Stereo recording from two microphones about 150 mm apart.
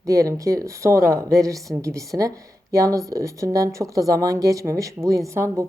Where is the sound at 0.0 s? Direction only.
20° right (ahead or behind).